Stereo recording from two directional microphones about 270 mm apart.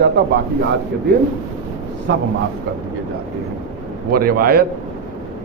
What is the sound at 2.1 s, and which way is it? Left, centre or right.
Speech, right.